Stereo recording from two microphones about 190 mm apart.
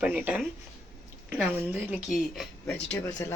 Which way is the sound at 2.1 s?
Centre (ahead or behind).